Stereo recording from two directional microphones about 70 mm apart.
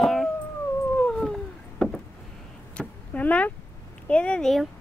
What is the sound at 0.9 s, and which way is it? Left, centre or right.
Cat, centre.